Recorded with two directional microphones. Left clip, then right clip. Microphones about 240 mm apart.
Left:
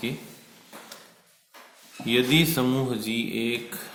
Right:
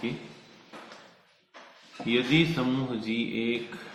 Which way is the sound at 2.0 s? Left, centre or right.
Left.